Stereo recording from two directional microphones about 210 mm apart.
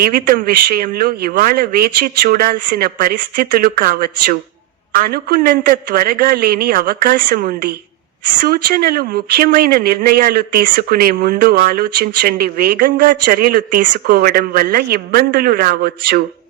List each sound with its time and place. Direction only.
0.0 s speech: 45° right (ahead or behind)